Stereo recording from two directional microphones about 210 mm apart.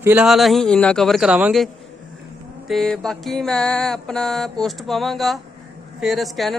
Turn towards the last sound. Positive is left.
turn(degrees=0)  # may be behind; listen again after turning